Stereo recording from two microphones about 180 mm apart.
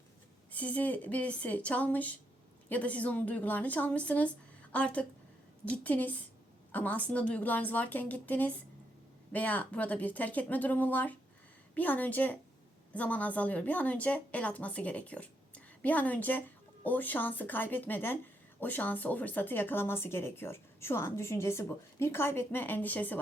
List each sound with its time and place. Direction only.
0.5 s speech: 10° left (ahead or behind)